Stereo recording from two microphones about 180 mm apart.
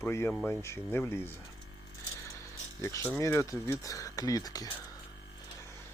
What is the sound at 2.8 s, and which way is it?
Speech, 15° left (ahead or behind).